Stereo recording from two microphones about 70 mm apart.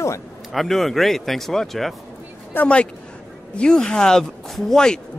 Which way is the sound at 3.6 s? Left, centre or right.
Centre.